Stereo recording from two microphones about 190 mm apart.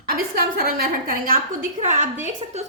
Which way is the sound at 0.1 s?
50° right (ahead or behind).